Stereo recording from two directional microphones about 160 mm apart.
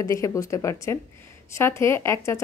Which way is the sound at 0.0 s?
20° left (ahead or behind).